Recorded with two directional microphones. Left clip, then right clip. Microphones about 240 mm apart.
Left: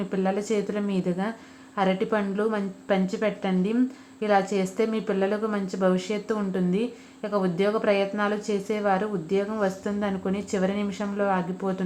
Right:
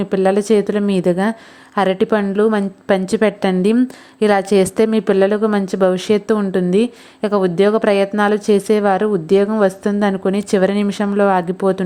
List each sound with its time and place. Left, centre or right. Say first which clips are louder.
0.1 s a woman's voice: right 13 dB; right